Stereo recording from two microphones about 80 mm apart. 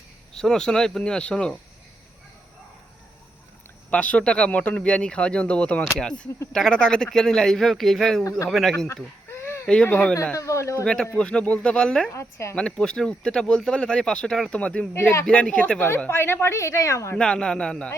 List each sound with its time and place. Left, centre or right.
0.3 s speech: centre
3.9 s speech: centre
9.3 s a sound: left
9.8 s speech: left
10.3 s a woman's voice: left
10.8 s speech: centre
12.1 s a woman's voice: left
12.5 s speech: centre
14.9 s a woman's voice: left
15.3 s speech: centre
16.1 s a woman's voice: left
17.2 s speech: centre